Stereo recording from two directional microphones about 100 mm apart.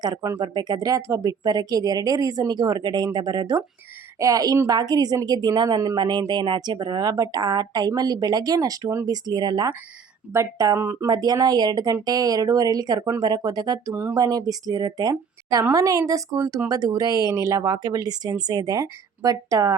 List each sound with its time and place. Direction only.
0.0 s a woman's voice: 40° right (ahead or behind)
10.3 s a woman's voice: 30° right (ahead or behind)
13.9 s speech: 25° right (ahead or behind)
14.2 s a woman's voice: 40° right (ahead or behind)